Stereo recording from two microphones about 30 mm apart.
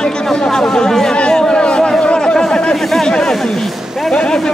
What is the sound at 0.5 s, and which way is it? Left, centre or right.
Speech, left.